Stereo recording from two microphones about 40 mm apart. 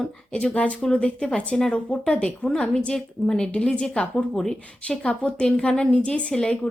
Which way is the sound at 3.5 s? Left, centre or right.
Left.